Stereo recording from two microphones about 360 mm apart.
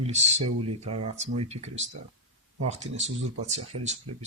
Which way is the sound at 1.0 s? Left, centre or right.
Centre.